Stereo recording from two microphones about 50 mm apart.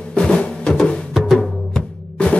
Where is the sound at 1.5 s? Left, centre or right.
Centre.